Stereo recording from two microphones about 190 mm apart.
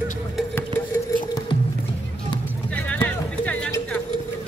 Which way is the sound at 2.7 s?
10° left (ahead or behind).